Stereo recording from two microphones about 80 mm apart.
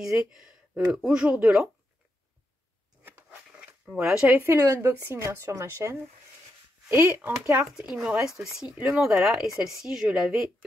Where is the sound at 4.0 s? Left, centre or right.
Centre.